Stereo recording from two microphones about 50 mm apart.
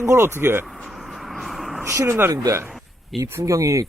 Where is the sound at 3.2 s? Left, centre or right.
Right.